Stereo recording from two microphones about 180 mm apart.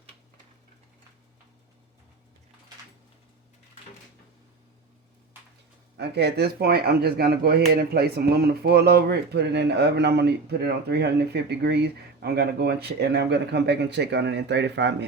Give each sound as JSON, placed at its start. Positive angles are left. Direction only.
{"t": 6.0, "sound": "speech", "side_deg": -70}